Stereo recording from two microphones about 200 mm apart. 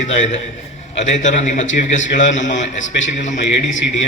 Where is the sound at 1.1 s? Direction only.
35° left (ahead or behind).